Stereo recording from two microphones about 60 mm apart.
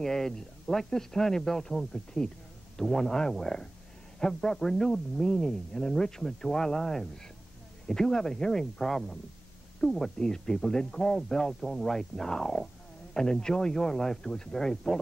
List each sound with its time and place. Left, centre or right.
0.0 s speech: centre